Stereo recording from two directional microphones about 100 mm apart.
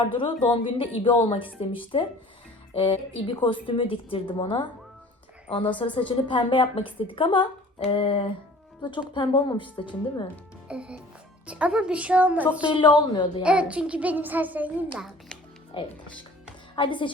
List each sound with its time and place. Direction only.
0.0 s a woman's voice: 60° left (ahead or behind)
8.8 s a woman's voice: 50° left (ahead or behind)
10.7 s a child's voice: 10° right (ahead or behind)
12.6 s speech: 55° left (ahead or behind)
13.4 s a child's voice: 15° right (ahead or behind)
15.7 s a woman's voice: 60° left (ahead or behind)